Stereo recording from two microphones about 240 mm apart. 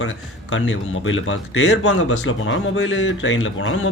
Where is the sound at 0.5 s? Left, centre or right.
Left.